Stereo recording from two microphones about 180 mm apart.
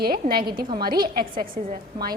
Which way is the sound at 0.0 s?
55° right (ahead or behind).